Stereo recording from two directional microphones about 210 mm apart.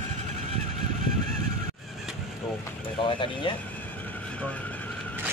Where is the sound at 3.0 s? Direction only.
25° left (ahead or behind).